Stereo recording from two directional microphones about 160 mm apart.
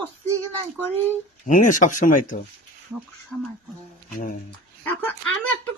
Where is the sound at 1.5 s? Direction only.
55° left (ahead or behind).